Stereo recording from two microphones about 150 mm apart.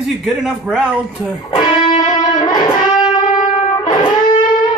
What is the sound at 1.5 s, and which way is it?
Music, 35° left (ahead or behind).